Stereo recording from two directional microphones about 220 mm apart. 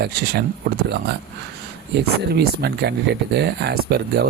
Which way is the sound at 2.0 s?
45° right (ahead or behind).